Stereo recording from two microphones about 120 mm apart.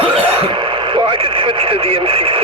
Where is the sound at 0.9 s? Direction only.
45° right (ahead or behind).